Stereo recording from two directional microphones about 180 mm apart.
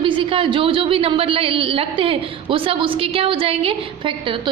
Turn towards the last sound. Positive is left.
turn(degrees=-30)  # may be behind; listen again after turning